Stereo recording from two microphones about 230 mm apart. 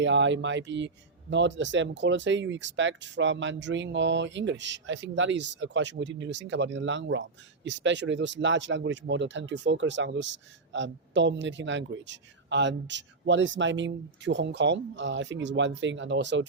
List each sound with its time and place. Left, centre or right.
0.0 s speech: right